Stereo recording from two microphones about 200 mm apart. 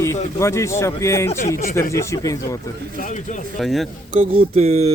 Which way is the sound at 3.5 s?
Centre (ahead or behind).